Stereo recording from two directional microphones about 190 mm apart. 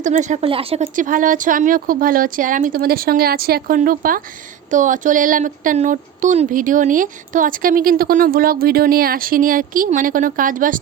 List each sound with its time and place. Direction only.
0.0 s a woman's voice: 40° right (ahead or behind)
0.9 s speech: 45° right (ahead or behind)